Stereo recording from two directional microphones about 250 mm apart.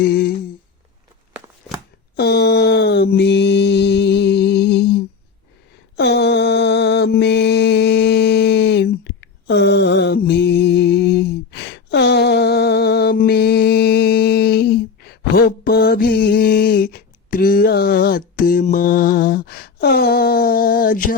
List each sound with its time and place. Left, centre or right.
0.0 s humming: left
2.1 s mantra: left